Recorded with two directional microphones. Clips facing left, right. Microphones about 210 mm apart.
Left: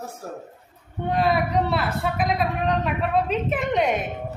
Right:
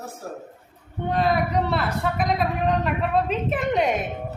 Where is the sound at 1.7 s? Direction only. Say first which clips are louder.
Even; centre (ahead or behind).